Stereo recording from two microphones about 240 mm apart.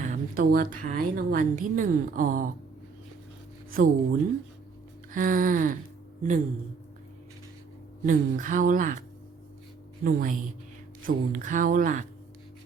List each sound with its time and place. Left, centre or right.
0.0 s speech: right
3.7 s speech: right
8.0 s speech: right